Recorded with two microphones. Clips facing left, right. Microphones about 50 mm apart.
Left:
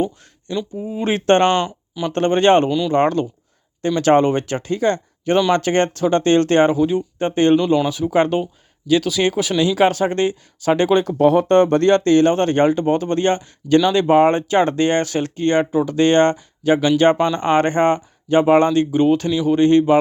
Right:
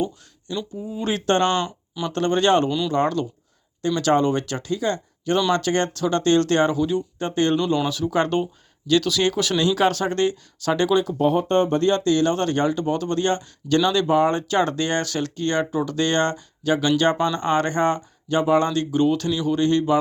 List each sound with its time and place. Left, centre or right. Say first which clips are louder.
0.9 s speech: left 6 dB; left
1.5 s speech: left 5 dB; centre
2.1 s speech: left 5 dB; left
2.6 s speech: left 4 dB; centre
2.9 s speech: left 5 dB; left
5.5 s speech: left 4 dB; left
10.9 s speech: left 3 dB; left
11.2 s speech: left 9 dB; left
12.0 s speech: left 6 dB; left